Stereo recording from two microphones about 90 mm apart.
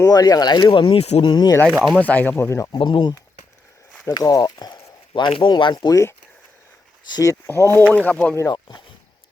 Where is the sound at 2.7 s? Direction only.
70° left (ahead or behind).